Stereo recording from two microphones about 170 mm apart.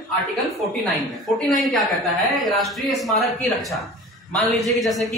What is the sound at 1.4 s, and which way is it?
Speech, centre (ahead or behind).